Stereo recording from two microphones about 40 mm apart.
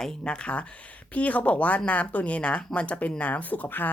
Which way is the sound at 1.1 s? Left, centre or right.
Left.